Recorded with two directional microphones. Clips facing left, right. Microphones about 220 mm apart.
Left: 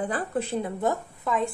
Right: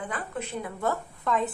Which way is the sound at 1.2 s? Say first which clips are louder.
Even; centre (ahead or behind).